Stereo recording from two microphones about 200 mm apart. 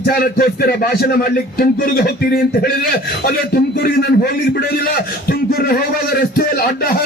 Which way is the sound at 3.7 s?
50° left (ahead or behind).